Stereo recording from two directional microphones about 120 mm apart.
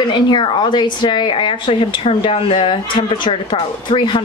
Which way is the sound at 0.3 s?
40° left (ahead or behind).